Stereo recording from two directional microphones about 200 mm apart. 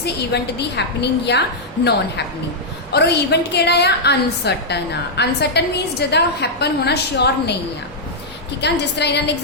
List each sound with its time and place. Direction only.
0.6 s a woman's voice: 60° left (ahead or behind)
8.6 s a woman's voice: 55° left (ahead or behind)